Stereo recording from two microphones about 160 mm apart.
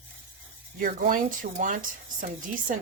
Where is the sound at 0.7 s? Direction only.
60° right (ahead or behind).